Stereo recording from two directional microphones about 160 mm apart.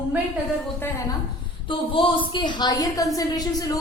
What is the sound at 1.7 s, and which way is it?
A woman's voice, 35° left (ahead or behind).